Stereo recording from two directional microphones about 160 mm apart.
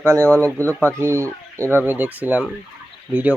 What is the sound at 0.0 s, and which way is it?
Speech, 15° right (ahead or behind).